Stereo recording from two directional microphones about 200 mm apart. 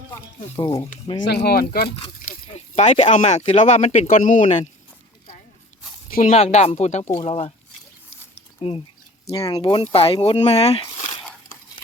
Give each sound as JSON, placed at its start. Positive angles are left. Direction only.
{"t": 0.1, "sound": "speech", "side_deg": 15}
{"t": 1.2, "sound": "speech", "side_deg": 55}
{"t": 2.5, "sound": "speech", "side_deg": 35}
{"t": 6.1, "sound": "speech", "side_deg": 45}
{"t": 6.3, "sound": "speech", "side_deg": 30}
{"t": 7.0, "sound": "speech", "side_deg": 15}
{"t": 7.3, "sound": "speech", "side_deg": 30}
{"t": 8.6, "sound": "speech", "side_deg": 30}